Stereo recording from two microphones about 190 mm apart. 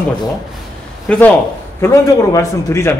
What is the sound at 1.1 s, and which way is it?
A man's voice, 5° left (ahead or behind).